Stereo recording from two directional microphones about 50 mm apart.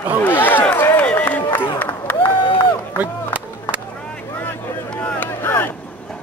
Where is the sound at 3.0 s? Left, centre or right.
Right.